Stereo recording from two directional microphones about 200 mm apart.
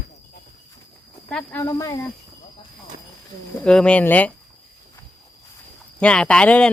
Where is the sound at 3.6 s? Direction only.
5° left (ahead or behind).